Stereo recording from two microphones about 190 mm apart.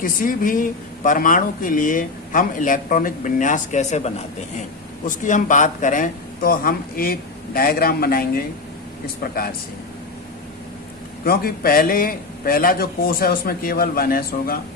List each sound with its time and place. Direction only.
0.0 s speech: 45° left (ahead or behind)
11.3 s speech: 50° left (ahead or behind)